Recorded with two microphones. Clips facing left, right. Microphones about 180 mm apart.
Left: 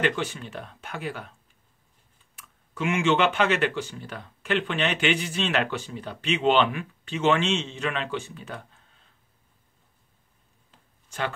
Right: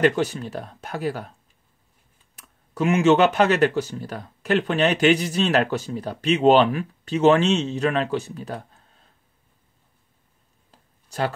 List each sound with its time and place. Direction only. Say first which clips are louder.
0.0 s speech: right 7 dB; 40° right (ahead or behind)
2.3 s speech: right 8 dB; 40° right (ahead or behind)
10.7 s a sound: right 5 dB; 40° right (ahead or behind)